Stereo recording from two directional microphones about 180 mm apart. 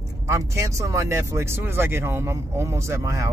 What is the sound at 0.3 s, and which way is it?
Speech, 15° right (ahead or behind).